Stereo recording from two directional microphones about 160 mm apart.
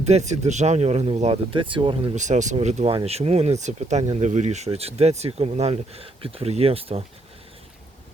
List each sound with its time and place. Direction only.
0.0 s speech: 45° right (ahead or behind)
2.1 s speech: 50° right (ahead or behind)